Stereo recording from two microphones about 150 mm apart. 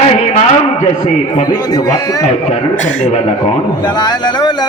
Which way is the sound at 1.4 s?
25° left (ahead or behind).